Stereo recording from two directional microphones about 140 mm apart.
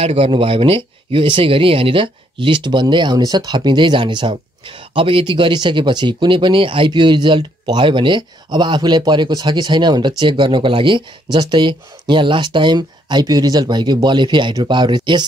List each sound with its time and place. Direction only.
0.0 s speech: 45° right (ahead or behind)